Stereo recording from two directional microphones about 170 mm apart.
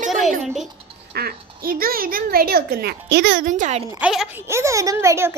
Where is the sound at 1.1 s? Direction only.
60° right (ahead or behind).